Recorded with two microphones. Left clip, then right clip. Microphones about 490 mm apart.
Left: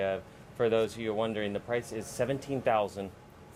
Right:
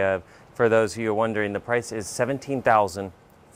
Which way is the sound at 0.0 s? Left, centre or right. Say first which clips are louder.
Right 8 dB; right.